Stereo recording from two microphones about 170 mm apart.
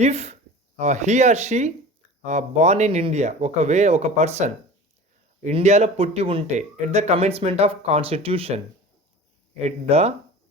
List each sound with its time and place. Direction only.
0.0 s speech: 40° right (ahead or behind)